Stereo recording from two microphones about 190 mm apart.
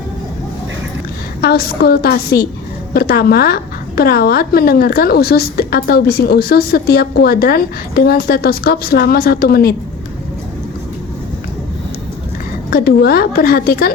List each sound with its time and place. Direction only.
1.4 s a woman's voice: 55° left (ahead or behind)
12.7 s a woman's voice: 55° left (ahead or behind)